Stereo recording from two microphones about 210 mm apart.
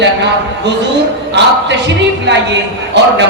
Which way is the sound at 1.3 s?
55° right (ahead or behind).